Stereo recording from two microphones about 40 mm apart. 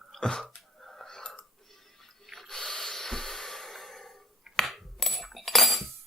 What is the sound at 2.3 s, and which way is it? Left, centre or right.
Snort, centre.